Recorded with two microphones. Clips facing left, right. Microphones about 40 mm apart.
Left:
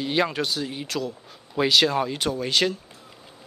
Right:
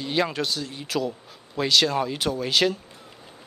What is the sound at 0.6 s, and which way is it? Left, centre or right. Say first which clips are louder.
Speech: left 4 dB; centre.